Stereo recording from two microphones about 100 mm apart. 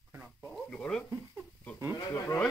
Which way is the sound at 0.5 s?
10° left (ahead or behind).